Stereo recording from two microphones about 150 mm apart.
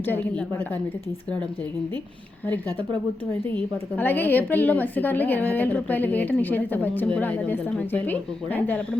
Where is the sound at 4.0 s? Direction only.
10° left (ahead or behind).